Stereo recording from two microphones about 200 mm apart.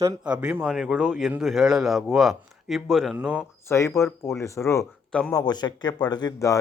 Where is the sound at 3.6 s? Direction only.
15° left (ahead or behind).